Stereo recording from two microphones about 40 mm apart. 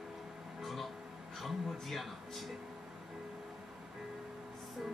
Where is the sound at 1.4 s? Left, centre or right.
Centre.